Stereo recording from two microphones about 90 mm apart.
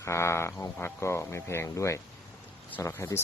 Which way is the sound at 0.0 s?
30° left (ahead or behind).